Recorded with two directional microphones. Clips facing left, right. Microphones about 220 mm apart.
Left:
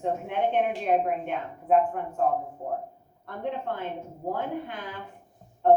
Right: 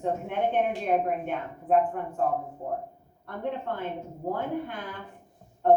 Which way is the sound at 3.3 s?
50° right (ahead or behind).